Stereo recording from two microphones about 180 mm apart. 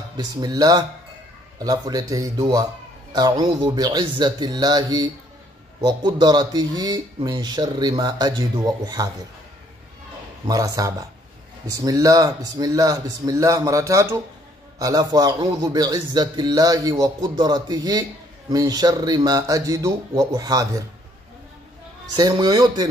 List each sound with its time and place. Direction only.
0.2 s speech: 20° right (ahead or behind)
10.4 s speech: 20° right (ahead or behind)
22.1 s speech: 20° right (ahead or behind)